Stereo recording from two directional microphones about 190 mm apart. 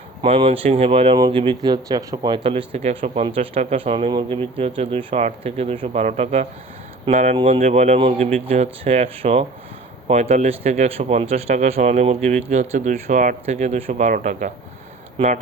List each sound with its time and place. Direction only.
0.2 s speech: 30° right (ahead or behind)